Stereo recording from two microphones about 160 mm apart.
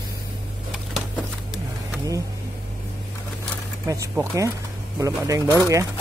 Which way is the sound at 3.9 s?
20° right (ahead or behind).